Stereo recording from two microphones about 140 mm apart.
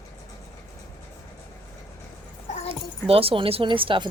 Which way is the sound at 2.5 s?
60° left (ahead or behind).